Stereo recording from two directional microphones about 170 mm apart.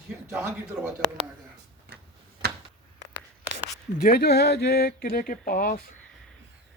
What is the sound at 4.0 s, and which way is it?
Speech, 60° left (ahead or behind).